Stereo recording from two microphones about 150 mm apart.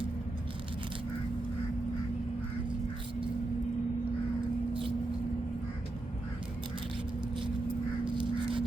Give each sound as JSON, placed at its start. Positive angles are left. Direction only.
{"t": 8.0, "sound": "duck", "side_deg": -35}